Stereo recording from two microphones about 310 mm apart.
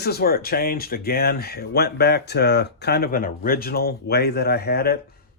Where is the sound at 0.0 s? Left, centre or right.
Left.